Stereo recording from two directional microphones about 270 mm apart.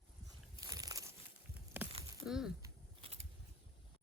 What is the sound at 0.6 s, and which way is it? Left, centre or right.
Biting, centre.